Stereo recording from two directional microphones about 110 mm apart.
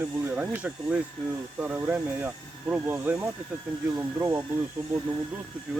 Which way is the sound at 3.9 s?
30° right (ahead or behind).